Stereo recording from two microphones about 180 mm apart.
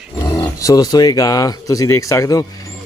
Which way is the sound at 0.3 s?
20° left (ahead or behind).